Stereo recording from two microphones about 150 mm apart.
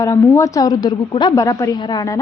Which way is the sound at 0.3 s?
20° left (ahead or behind).